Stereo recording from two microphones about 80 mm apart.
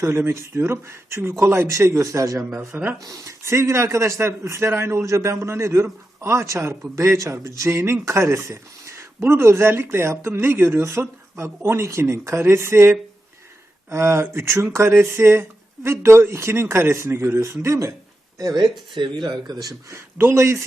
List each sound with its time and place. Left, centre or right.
0.0 s speech: right
2.6 s speech: right
3.0 s speech: right
18.3 s speech: right
18.9 s speech: right
19.3 s speech: right
20.1 s speech: right